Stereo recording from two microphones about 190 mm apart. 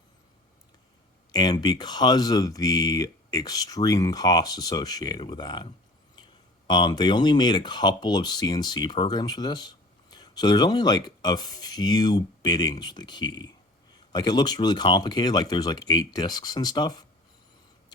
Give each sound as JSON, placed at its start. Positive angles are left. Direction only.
{"t": 1.3, "sound": "speech", "side_deg": 20}
{"t": 6.7, "sound": "speech", "side_deg": 20}